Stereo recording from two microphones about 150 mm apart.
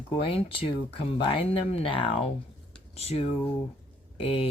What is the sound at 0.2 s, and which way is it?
Speech, 35° left (ahead or behind).